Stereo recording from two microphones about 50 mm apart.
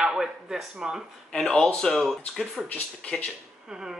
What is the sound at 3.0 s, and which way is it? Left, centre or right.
Speech, left.